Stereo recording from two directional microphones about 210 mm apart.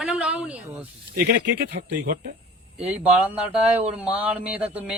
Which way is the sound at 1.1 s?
40° right (ahead or behind).